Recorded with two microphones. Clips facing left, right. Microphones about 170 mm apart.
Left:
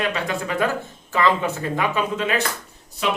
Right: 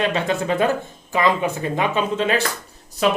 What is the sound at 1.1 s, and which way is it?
Speech, 15° right (ahead or behind).